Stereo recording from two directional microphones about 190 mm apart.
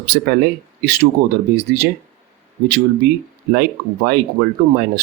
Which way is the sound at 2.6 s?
55° right (ahead or behind).